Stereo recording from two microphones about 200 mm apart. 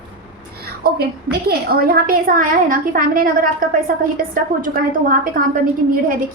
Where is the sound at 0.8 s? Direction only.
50° right (ahead or behind).